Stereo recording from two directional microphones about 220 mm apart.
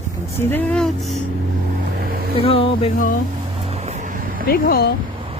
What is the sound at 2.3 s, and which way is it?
Speech, 25° left (ahead or behind).